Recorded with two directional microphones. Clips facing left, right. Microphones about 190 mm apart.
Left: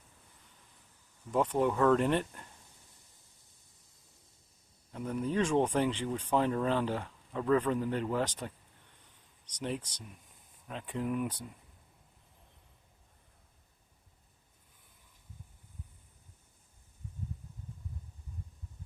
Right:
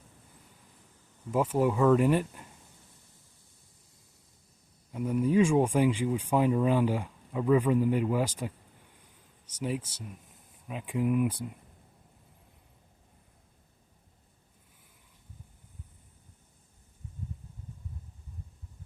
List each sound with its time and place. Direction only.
1.3 s speech: 5° right (ahead or behind)
4.9 s speech: 10° right (ahead or behind)